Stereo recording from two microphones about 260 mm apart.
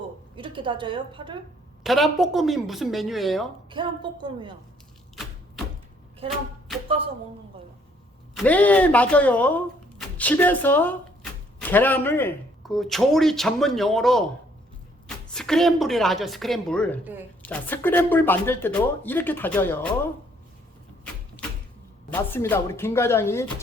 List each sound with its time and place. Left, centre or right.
0.3 s a woman's voice: centre
1.8 s a woman's voice: centre
3.7 s a woman's voice: centre
5.1 s a sound: centre
8.4 s a woman's voice: centre
17.0 s a woman's voice: centre
17.4 s speech: centre
22.1 s speech: centre